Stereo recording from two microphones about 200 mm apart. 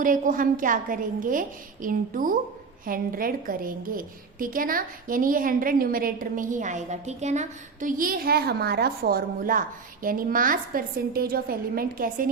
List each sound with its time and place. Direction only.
0.0 s a woman's voice: 40° right (ahead or behind)